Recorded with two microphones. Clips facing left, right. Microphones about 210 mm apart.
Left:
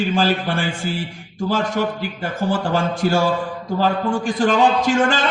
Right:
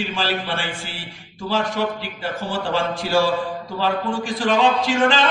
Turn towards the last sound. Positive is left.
turn(degrees=45)  # may be behind; listen again after turning